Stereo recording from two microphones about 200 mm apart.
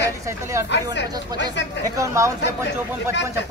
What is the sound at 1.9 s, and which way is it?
Speech, 15° right (ahead or behind).